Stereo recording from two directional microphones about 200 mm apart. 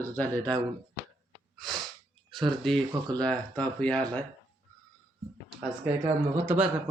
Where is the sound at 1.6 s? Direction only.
Centre (ahead or behind).